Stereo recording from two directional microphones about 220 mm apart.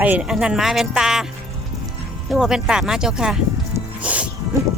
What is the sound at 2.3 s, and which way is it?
Speech, 5° right (ahead or behind).